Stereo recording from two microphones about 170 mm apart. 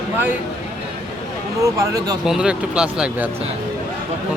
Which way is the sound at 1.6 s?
20° right (ahead or behind).